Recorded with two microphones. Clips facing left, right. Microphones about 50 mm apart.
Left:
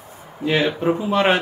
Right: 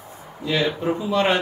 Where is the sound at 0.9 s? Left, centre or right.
Left.